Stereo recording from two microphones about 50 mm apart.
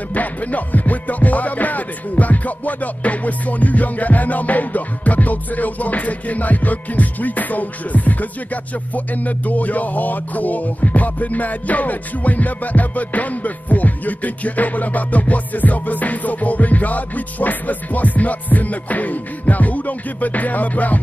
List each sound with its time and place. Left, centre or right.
0.1 s music: left